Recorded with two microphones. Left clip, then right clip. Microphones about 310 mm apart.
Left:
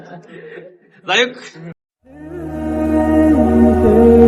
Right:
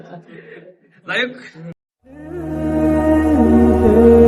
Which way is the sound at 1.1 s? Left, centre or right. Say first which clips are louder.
Left 5 dB; centre.